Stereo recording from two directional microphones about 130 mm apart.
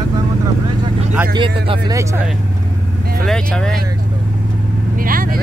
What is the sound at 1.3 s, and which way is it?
Speech, 40° right (ahead or behind).